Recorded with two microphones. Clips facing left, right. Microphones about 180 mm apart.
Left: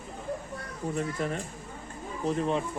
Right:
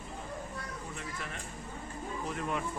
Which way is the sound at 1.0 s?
40° left (ahead or behind).